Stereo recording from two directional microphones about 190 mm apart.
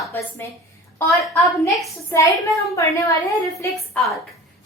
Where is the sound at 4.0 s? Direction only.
10° left (ahead or behind).